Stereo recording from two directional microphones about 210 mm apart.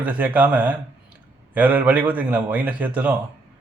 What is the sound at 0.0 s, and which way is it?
A man's voice, 5° right (ahead or behind).